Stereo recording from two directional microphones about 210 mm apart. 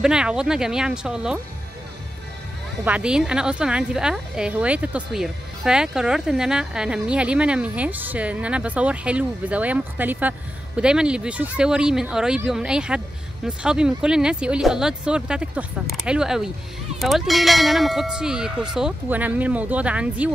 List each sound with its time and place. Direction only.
0.0 s speech: 5° right (ahead or behind)
2.8 s speech: 5° right (ahead or behind)